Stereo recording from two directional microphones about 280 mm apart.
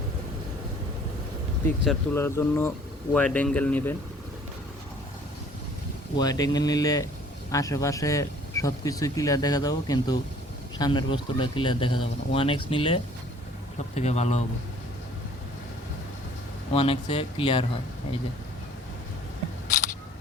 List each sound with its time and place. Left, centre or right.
1.6 s speech: centre
6.1 s speech: centre
16.7 s speech: centre